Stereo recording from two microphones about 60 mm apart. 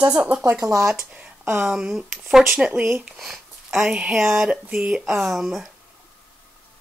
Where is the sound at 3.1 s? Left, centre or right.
Centre.